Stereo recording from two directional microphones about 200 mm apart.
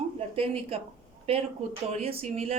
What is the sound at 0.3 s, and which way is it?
Speech, 30° right (ahead or behind).